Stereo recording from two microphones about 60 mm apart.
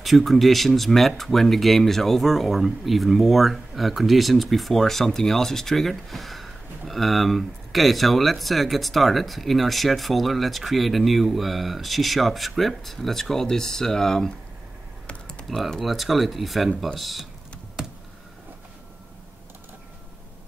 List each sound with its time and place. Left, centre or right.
0.0 s speech: centre
15.0 s typing: centre
15.8 s speech: centre
17.8 s computer keyboard: centre